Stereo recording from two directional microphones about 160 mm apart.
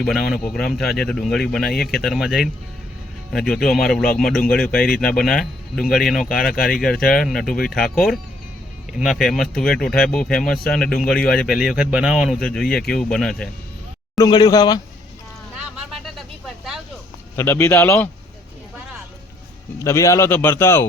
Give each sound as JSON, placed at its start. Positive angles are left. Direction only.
{"t": 0.0, "sound": "speech", "side_deg": 0}
{"t": 14.2, "sound": "speech", "side_deg": 25}
{"t": 15.5, "sound": "vehicle", "side_deg": -5}
{"t": 17.3, "sound": "a man's voice", "side_deg": 15}
{"t": 19.8, "sound": "a man's voice", "side_deg": 20}